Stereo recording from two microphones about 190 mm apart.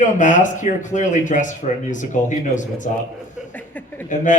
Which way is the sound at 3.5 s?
10° left (ahead or behind).